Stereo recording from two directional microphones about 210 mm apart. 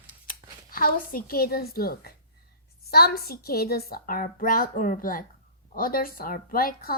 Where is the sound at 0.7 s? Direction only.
45° left (ahead or behind).